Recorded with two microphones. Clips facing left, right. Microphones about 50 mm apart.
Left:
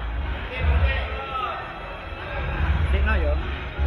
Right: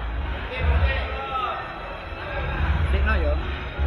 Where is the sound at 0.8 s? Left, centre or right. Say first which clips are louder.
Right 1 dB; centre.